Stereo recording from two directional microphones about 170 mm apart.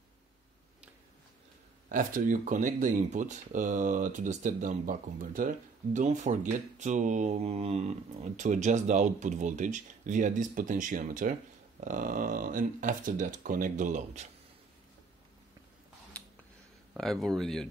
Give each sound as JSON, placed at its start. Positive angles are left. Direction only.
{"t": 1.9, "sound": "speech", "side_deg": -50}
{"t": 16.1, "sound": "a sound", "side_deg": 5}
{"t": 16.9, "sound": "speech", "side_deg": 0}